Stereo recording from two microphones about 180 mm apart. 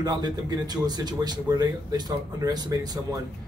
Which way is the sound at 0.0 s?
20° right (ahead or behind).